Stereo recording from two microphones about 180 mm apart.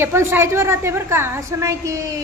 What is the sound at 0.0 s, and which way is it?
Speech, 15° right (ahead or behind).